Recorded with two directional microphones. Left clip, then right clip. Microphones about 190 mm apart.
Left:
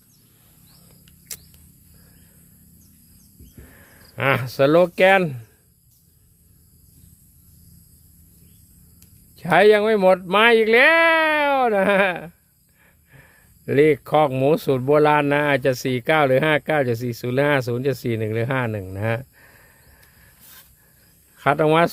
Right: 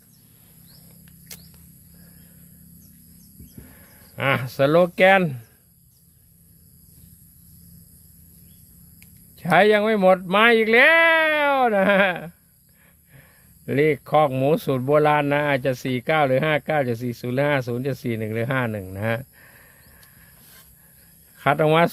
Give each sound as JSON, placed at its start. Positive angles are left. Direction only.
{"t": 1.3, "sound": "rodents", "side_deg": 25}
{"t": 3.6, "sound": "speech", "side_deg": 25}
{"t": 9.3, "sound": "speech", "side_deg": 15}
{"t": 21.3, "sound": "speech", "side_deg": 15}